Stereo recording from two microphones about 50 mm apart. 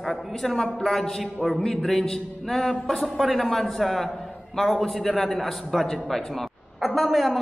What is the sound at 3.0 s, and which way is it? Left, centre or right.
A man's voice, centre.